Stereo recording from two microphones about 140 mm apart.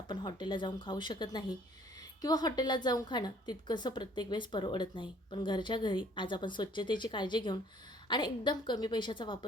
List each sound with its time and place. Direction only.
0.1 s a woman's voice: 35° left (ahead or behind)